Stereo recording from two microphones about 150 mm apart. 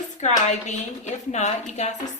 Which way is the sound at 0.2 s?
50° left (ahead or behind).